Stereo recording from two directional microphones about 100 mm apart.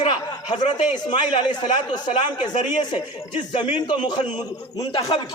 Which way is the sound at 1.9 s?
50° left (ahead or behind).